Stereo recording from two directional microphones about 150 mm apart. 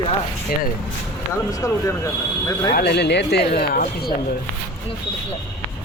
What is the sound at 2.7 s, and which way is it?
Speech, 90° left.